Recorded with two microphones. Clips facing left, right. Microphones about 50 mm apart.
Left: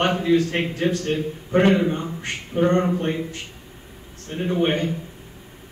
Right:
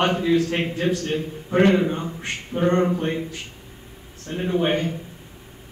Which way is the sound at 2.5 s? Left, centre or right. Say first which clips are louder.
Left 1 dB; centre.